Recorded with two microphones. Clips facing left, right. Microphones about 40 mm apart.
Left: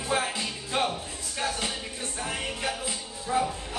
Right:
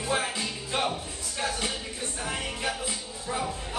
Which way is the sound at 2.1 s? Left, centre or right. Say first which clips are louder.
Left 1 dB; centre.